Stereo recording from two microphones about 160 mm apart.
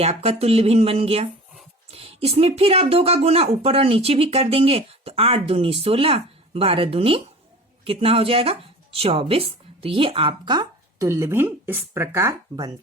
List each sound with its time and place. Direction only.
0.0 s speech: 40° right (ahead or behind); by 12.7 s 20° right (ahead or behind)